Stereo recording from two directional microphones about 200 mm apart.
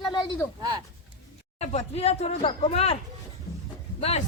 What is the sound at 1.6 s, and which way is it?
Speech, 35° left (ahead or behind).